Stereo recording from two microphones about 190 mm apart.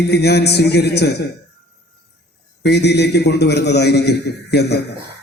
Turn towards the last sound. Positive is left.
turn(degrees=60)  # may be behind; listen again after turning